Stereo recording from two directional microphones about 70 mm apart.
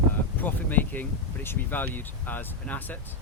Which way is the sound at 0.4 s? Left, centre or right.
Left.